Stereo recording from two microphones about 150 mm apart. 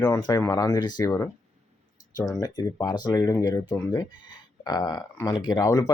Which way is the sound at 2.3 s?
25° left (ahead or behind).